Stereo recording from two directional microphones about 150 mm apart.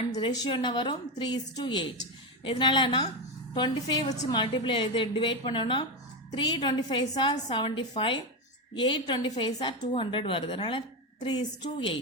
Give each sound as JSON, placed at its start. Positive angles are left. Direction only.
{"t": 0.1, "sound": "a woman's voice", "side_deg": 30}